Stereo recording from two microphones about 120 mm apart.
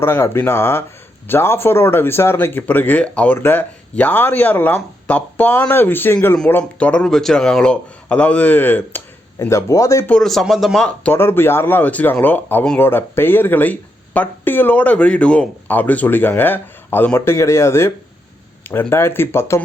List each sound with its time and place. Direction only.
0.0 s speech: 20° left (ahead or behind)
10.1 s speech: 5° left (ahead or behind); by 19.6 s 20° left (ahead or behind)